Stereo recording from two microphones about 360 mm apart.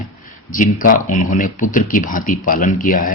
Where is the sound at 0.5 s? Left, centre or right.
Left.